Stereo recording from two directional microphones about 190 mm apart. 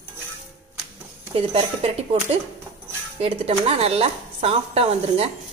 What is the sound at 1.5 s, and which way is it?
Speech, 30° right (ahead or behind).